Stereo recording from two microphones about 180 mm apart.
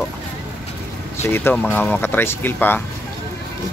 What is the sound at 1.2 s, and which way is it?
Speech, 15° left (ahead or behind).